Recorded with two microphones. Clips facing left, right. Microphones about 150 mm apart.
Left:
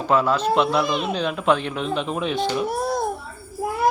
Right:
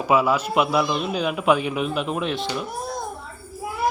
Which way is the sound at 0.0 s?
10° right (ahead or behind).